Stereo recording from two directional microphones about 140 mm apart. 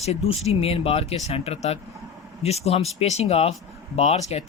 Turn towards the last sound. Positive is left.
turn(degrees=50)  # may be behind; listen again after turning